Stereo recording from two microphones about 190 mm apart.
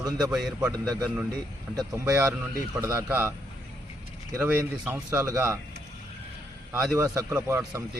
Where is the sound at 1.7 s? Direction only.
20° right (ahead or behind).